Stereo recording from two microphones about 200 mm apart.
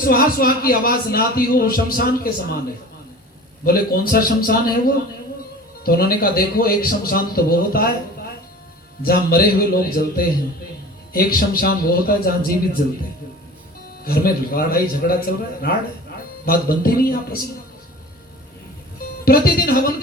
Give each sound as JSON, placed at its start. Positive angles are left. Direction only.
{"t": 0.0, "sound": "a man's voice", "side_deg": 45}
{"t": 3.6, "sound": "a man's voice", "side_deg": 50}
{"t": 9.0, "sound": "a man's voice", "side_deg": 50}
{"t": 14.0, "sound": "a man's voice", "side_deg": 50}
{"t": 16.5, "sound": "a man's voice", "side_deg": 45}
{"t": 19.2, "sound": "a man's voice", "side_deg": 50}